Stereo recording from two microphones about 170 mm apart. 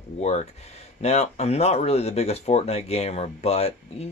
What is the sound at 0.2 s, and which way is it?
Speech, 45° left (ahead or behind).